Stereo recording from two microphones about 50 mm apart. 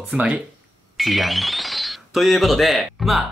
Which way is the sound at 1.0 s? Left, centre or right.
Centre.